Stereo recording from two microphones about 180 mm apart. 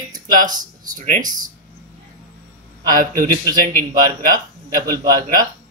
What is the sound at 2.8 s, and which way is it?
A man's voice, 55° right (ahead or behind).